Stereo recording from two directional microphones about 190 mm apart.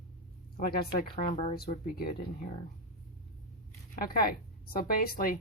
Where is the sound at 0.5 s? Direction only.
55° left (ahead or behind).